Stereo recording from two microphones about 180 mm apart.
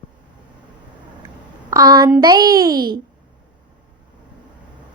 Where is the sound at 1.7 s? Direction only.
20° right (ahead or behind).